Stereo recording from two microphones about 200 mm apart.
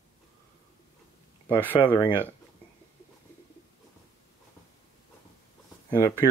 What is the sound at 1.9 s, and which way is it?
Speech, 20° left (ahead or behind).